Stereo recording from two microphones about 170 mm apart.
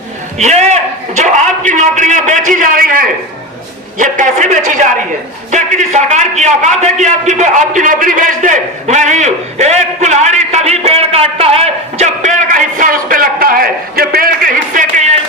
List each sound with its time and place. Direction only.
0.3 s a man's voice: 45° right (ahead or behind)